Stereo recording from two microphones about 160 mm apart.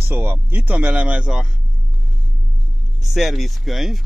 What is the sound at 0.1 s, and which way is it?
A man's voice, 15° right (ahead or behind).